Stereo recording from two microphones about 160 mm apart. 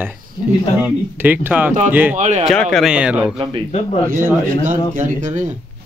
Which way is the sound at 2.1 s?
50° right (ahead or behind).